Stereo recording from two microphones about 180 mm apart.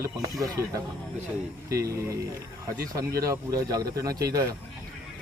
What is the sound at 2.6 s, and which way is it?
Speech, 20° right (ahead or behind).